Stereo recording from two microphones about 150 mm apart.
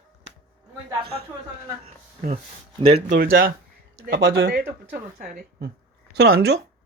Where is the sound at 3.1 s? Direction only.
80° right.